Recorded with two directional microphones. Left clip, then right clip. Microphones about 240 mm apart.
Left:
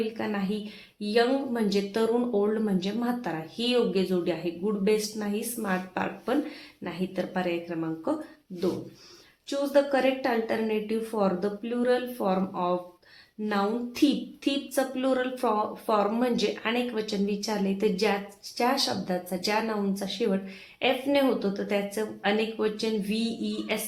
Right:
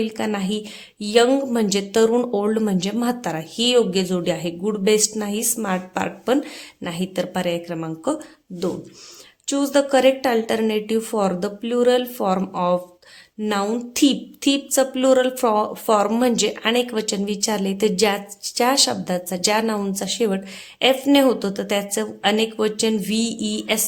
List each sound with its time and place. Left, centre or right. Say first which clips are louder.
0.2 s speech: right 7 dB; right
9.5 s speech: right 6 dB; right